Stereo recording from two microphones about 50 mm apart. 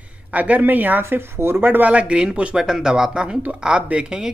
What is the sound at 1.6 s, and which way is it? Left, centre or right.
Speech, right.